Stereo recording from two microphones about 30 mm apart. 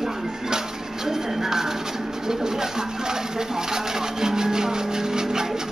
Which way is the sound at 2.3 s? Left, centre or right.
Right.